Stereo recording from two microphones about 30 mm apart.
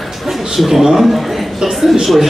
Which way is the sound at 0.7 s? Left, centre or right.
Centre.